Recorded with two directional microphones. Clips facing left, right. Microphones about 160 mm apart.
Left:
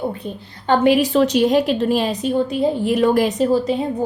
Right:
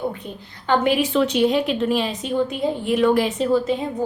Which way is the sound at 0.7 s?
40° left (ahead or behind).